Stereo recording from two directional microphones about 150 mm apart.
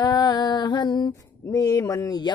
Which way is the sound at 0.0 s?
25° left (ahead or behind).